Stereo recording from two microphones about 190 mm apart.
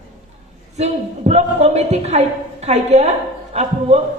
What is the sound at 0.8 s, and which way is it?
A man's voice, 35° right (ahead or behind).